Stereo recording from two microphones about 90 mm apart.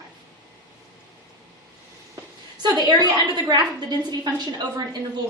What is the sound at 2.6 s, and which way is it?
A woman's voice, 55° right (ahead or behind).